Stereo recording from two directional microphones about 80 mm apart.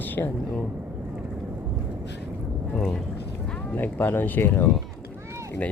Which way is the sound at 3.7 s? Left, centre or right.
Left.